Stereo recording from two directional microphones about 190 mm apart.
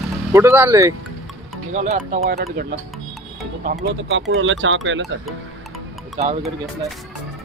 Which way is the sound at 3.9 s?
90° right.